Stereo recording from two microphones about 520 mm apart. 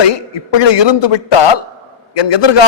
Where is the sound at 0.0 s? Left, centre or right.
Left.